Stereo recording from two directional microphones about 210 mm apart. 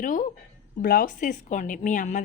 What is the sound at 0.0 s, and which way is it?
A woman's voice, 40° left (ahead or behind).